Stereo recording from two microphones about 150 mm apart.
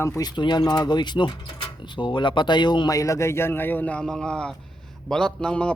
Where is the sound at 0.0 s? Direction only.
20° left (ahead or behind).